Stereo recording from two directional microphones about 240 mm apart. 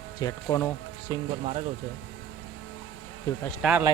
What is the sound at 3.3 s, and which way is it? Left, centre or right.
Speech, centre.